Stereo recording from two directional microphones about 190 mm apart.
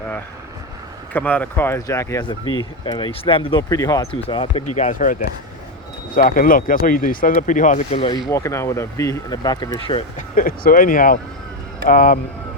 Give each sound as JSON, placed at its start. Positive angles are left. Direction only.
{"t": 1.1, "sound": "speech", "side_deg": 10}
{"t": 4.6, "sound": "speech", "side_deg": 40}
{"t": 6.1, "sound": "speech", "side_deg": 50}
{"t": 8.3, "sound": "speech", "side_deg": 15}
{"t": 10.2, "sound": "speech", "side_deg": 45}